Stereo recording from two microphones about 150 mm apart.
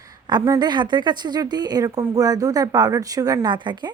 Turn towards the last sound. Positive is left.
turn(degrees=-30)  # may be behind; listen again after turning